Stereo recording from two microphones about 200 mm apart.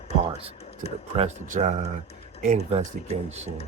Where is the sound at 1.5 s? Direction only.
40° right (ahead or behind).